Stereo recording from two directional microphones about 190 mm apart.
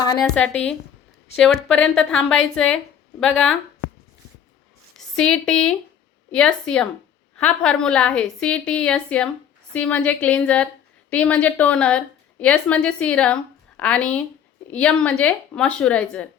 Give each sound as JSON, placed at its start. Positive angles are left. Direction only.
{"t": 0.2, "sound": "a woman's voice", "side_deg": 5}
{"t": 4.9, "sound": "a woman's voice", "side_deg": 5}